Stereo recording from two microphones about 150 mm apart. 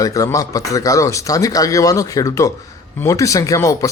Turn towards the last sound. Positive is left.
turn(degrees=20)  # may be behind; listen again after turning